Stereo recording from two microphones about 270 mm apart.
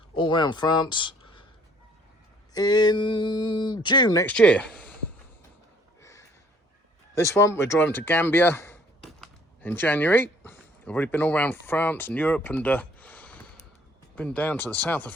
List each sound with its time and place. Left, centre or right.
0.1 s speech: centre
2.5 s speech: centre
6.0 s a sound: centre
7.2 s speech: centre